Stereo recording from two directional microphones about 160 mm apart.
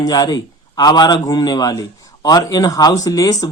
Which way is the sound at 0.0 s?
25° left (ahead or behind).